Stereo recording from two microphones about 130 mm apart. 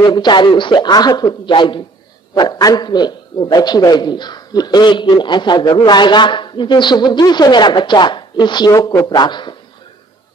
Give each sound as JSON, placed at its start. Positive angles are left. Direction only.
{"t": 0.0, "sound": "a man's voice", "side_deg": 35}